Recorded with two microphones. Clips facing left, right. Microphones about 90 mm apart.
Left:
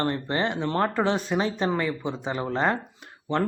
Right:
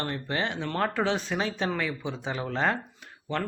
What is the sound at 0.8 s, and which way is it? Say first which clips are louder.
Speech: left 2 dB; 5° left (ahead or behind).